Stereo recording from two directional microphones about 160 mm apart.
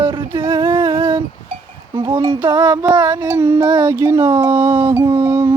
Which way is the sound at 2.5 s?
25° right (ahead or behind).